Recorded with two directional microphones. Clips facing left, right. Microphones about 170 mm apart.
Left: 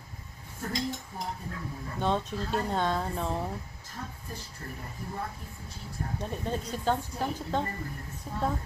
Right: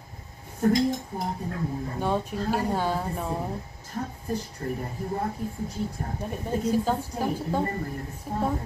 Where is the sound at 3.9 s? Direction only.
40° right (ahead or behind).